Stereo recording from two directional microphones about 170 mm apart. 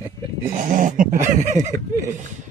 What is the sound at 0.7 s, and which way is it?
Speech, 50° right (ahead or behind).